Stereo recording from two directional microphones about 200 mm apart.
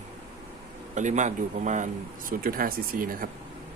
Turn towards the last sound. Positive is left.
turn(degrees=-45)  # may be behind; listen again after turning